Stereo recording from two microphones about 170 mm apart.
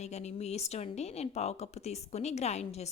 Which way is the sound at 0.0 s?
40° left (ahead or behind).